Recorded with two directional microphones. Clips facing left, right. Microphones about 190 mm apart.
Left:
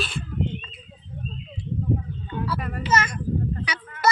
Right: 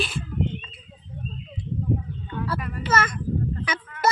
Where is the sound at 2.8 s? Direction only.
50° right (ahead or behind).